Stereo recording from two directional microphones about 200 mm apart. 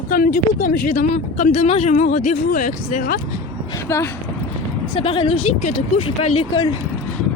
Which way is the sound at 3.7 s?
10° left (ahead or behind).